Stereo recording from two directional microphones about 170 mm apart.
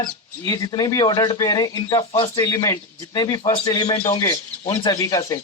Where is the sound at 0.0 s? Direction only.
25° left (ahead or behind).